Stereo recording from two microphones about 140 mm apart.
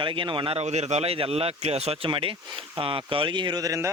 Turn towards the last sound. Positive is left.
turn(degrees=-25)  # may be behind; listen again after turning